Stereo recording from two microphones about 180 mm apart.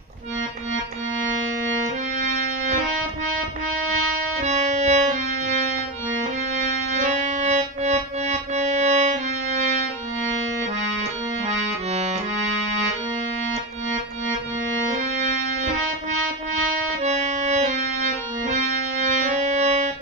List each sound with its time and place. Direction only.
2.1 s music: 40° right (ahead or behind)
4.4 s music: 40° right (ahead or behind)
7.0 s music: 45° right (ahead or behind)
11.4 s accordion: 40° right (ahead or behind)
17.0 s music: 40° right (ahead or behind)
19.2 s music: 40° right (ahead or behind)